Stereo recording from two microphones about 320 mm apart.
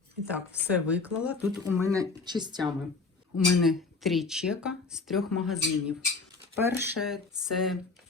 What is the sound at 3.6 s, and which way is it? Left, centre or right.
Speech, centre.